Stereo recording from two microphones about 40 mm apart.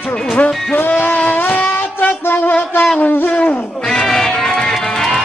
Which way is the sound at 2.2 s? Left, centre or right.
Left.